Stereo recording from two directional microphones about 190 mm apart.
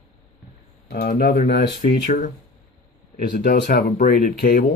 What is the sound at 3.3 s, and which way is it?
Speech, 50° left (ahead or behind).